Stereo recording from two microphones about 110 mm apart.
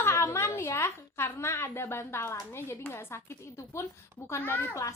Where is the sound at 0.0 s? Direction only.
25° left (ahead or behind).